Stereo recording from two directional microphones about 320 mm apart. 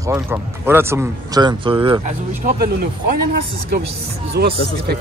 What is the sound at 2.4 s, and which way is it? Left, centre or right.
Speech, right.